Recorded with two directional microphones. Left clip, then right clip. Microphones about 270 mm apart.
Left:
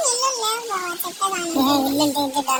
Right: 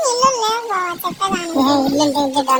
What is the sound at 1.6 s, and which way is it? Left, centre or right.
Speech, centre.